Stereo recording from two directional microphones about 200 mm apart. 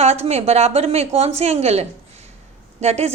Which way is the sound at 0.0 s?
30° right (ahead or behind).